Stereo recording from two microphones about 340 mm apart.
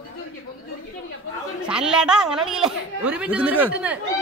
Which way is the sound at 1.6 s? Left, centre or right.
Centre.